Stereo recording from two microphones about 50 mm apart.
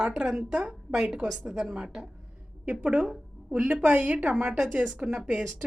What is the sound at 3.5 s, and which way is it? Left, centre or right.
Speech, centre.